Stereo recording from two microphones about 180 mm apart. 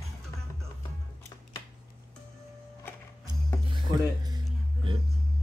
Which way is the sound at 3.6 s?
25° right (ahead or behind).